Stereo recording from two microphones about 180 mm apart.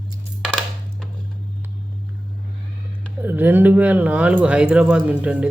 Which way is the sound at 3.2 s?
10° right (ahead or behind).